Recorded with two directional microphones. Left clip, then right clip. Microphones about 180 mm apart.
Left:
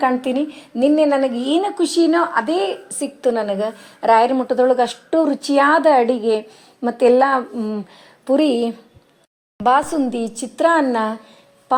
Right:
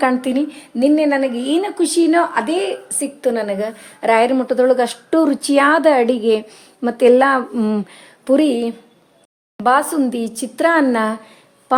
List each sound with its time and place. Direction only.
0.2 s a woman's voice: 5° right (ahead or behind)
4.0 s speech: 10° right (ahead or behind)
7.5 s speech: 35° right (ahead or behind)
8.2 s a woman's voice: 20° right (ahead or behind)
8.4 s a woman's voice: 10° left (ahead or behind)
10.0 s a woman's voice: 10° right (ahead or behind)